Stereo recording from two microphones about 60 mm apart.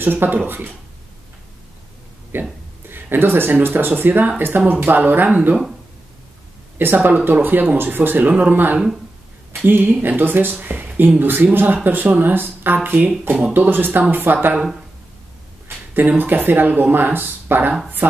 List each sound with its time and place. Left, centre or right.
0.0 s speech: right
2.3 s speech: right
6.8 s speech: right
8.3 s speech: right
9.7 s speech: right
15.9 s speech: right